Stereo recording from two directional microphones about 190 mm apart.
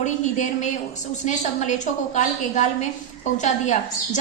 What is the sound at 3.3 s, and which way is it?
Speech, 40° left (ahead or behind).